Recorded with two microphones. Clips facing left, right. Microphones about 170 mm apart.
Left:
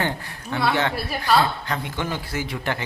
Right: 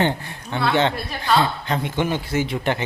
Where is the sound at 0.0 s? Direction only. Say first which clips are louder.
Right 5 dB; 20° right (ahead or behind).